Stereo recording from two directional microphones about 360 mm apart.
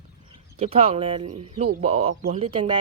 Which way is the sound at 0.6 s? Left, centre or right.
Centre.